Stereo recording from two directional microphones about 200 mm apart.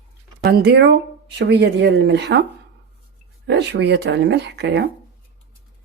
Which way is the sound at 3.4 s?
60° right (ahead or behind).